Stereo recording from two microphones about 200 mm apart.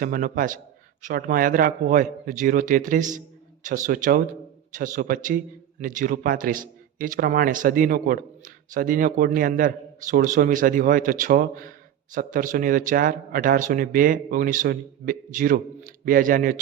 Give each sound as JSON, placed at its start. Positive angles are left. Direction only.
{"t": 0.0, "sound": "a man's voice", "side_deg": -45}